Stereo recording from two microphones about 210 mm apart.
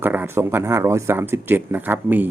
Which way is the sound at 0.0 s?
10° right (ahead or behind).